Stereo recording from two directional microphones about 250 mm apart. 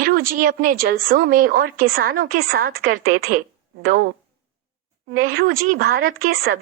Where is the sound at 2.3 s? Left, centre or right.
Right.